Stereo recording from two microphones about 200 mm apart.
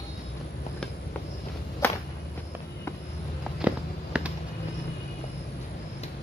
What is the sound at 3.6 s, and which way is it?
Walk, 5° right (ahead or behind).